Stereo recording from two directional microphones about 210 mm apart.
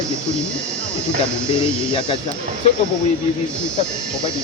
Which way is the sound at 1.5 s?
25° left (ahead or behind).